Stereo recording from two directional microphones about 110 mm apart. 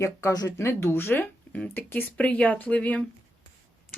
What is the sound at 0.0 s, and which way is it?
Speech, 30° left (ahead or behind).